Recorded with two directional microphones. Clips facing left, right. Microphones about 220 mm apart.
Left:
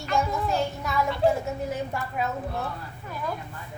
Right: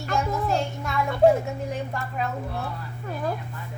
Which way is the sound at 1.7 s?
10° left (ahead or behind).